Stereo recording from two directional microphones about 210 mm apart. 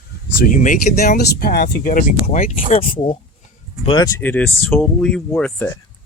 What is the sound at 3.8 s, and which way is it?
Speech, 20° left (ahead or behind).